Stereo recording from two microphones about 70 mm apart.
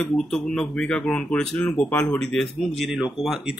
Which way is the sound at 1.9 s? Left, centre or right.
Left.